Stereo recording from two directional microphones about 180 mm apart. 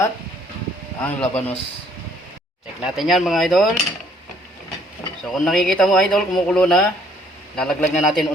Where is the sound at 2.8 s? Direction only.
Centre (ahead or behind).